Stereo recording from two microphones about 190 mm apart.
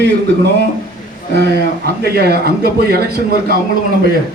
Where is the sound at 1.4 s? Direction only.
60° right (ahead or behind).